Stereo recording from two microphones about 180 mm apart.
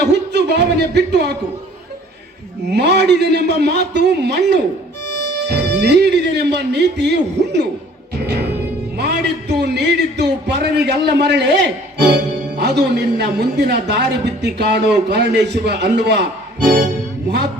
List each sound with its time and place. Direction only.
0.0 s speech: 70° right (ahead or behind)
2.7 s a man's voice: 70° right (ahead or behind)
9.0 s a man's voice: 70° right (ahead or behind)
17.2 s a man's voice: 70° right (ahead or behind)